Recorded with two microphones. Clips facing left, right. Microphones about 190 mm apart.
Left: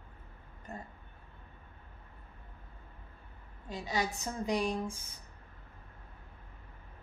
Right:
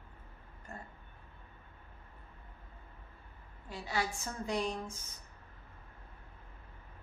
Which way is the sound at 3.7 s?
20° left (ahead or behind).